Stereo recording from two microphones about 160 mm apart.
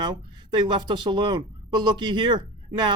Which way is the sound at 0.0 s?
30° right (ahead or behind).